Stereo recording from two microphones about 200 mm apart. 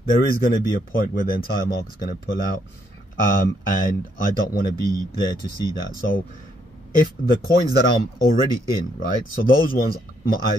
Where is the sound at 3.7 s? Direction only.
45° left (ahead or behind).